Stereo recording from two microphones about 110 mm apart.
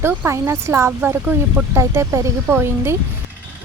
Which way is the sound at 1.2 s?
15° right (ahead or behind).